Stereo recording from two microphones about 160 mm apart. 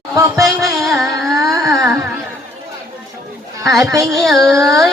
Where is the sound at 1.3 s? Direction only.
20° right (ahead or behind).